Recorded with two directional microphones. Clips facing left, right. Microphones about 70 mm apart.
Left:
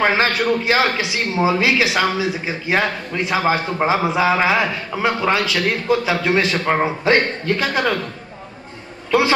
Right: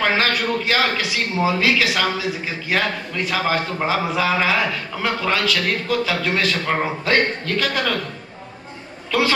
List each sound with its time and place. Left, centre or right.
0.0 s a man's voice: left
9.1 s a man's voice: left